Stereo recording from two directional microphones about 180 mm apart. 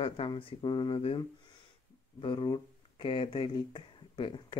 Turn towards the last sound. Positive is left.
turn(degrees=25)  # may be behind; listen again after turning